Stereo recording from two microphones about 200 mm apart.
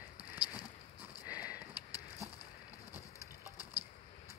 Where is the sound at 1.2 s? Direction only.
5° right (ahead or behind).